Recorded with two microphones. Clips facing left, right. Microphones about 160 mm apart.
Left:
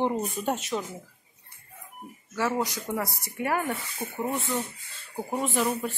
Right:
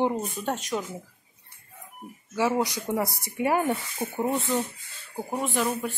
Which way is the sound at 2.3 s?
15° right (ahead or behind).